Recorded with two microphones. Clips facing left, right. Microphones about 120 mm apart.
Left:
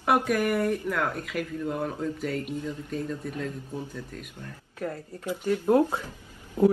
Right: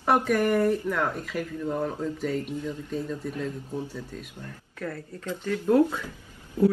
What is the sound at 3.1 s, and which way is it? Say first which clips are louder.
Speech: right 1 dB; 10° right (ahead or behind).